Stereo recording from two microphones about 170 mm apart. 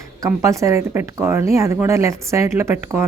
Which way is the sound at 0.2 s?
20° right (ahead or behind).